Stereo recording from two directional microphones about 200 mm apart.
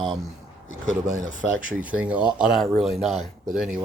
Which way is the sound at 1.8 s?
5° right (ahead or behind).